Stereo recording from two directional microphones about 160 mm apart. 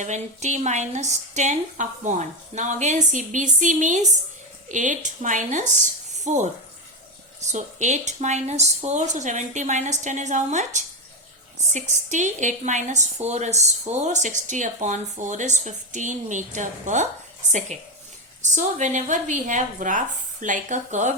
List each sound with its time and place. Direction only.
0.0 s a woman's voice: 45° right (ahead or behind)
18.5 s a woman's voice: 50° right (ahead or behind)